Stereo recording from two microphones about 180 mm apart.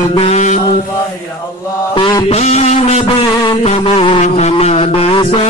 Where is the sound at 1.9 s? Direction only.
25° left (ahead or behind).